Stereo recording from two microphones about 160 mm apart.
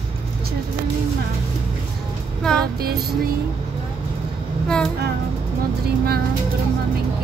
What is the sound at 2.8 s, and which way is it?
Vehicle, 75° right (ahead or behind).